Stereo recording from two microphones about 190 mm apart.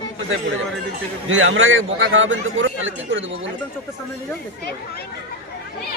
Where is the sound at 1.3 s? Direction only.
90° right.